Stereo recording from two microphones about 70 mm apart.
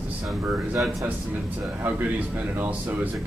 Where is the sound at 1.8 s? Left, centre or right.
Right.